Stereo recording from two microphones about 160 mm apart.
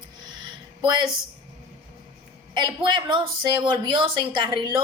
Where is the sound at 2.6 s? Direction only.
30° right (ahead or behind).